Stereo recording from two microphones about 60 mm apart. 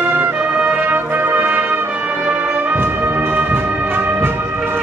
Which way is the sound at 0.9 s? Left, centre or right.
Right.